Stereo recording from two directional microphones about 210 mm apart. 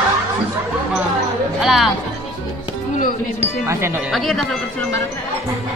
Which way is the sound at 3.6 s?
15° right (ahead or behind).